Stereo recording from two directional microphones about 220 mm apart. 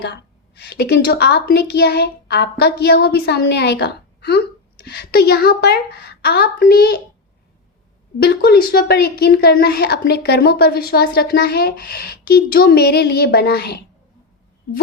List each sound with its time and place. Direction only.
0.0 s a woman's voice: 50° left (ahead or behind)
8.2 s a woman's voice: 45° left (ahead or behind)